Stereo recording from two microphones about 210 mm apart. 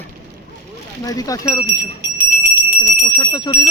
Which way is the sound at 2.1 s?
45° right (ahead or behind).